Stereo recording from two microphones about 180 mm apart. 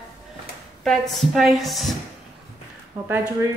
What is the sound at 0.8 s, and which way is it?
A woman's voice, centre (ahead or behind).